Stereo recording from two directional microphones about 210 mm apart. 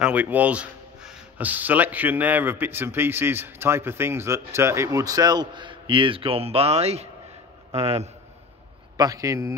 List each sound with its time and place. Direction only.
0.0 s a man's voice: 5° right (ahead or behind); by 8.1 s 30° right (ahead or behind)
8.9 s speech: 15° right (ahead or behind)